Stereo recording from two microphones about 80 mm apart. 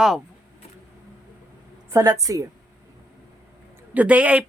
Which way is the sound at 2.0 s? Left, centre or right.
Right.